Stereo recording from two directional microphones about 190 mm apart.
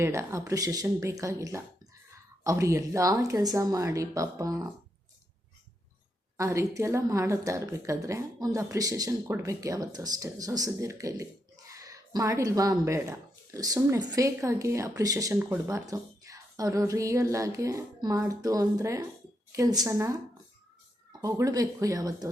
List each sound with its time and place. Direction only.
0.0 s speech: 15° right (ahead or behind)
6.3 s speech: 15° right (ahead or behind)